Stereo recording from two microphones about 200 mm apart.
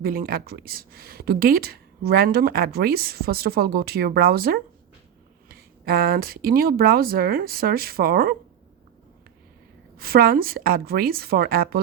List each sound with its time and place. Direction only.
0.0 s a woman's voice: 45° right (ahead or behind)
10.0 s a woman's voice: 50° right (ahead or behind)